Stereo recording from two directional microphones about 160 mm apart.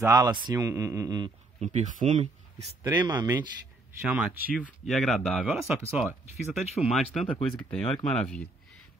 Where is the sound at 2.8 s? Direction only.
25° right (ahead or behind).